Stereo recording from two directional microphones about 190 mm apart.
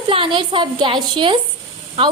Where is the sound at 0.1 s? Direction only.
25° right (ahead or behind).